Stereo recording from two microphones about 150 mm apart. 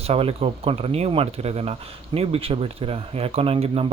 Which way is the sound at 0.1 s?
40° right (ahead or behind).